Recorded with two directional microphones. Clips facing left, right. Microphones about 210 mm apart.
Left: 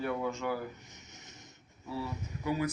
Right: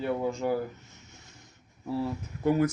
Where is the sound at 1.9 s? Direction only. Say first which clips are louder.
Right 7 dB; 55° right (ahead or behind).